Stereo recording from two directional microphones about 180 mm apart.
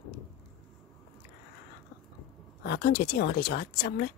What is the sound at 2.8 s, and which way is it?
Speech, 60° left (ahead or behind).